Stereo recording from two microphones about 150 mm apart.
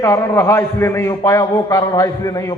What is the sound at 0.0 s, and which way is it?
A man's voice, 20° left (ahead or behind).